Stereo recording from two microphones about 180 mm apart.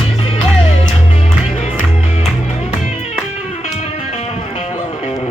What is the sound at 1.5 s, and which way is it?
Music, 40° left (ahead or behind).